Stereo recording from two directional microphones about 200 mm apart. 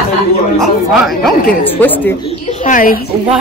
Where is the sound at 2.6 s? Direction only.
45° left (ahead or behind).